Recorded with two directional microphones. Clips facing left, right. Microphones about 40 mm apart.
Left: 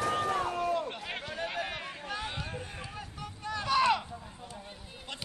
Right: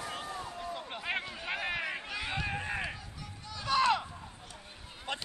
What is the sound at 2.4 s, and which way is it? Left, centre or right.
Run, right.